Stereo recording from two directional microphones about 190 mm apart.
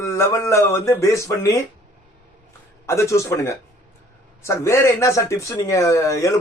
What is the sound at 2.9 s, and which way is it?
Speech, 15° left (ahead or behind).